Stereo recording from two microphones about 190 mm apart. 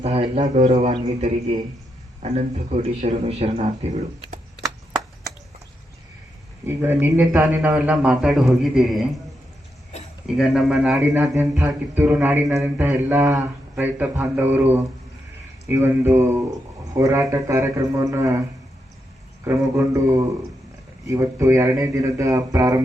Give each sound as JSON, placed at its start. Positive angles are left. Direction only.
{"t": 0.0, "sound": "a man's voice", "side_deg": -30}
{"t": 6.7, "sound": "a man's voice", "side_deg": -10}
{"t": 10.3, "sound": "a man's voice", "side_deg": 0}
{"t": 19.5, "sound": "speech", "side_deg": -15}